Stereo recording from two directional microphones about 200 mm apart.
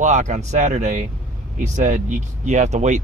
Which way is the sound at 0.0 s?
35° right (ahead or behind).